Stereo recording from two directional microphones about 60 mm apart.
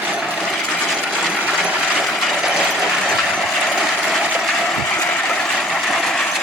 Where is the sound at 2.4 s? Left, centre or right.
Centre.